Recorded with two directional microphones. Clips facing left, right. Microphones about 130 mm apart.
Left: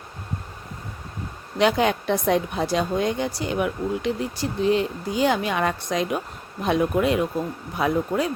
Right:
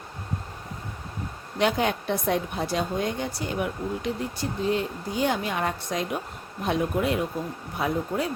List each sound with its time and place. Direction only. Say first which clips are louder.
1.5 s a woman's voice: left 4 dB; 90° left